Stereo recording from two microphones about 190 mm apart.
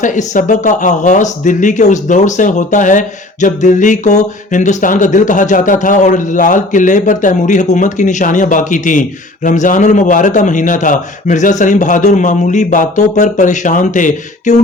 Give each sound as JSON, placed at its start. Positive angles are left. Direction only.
{"t": 0.0, "sound": "speech", "side_deg": 40}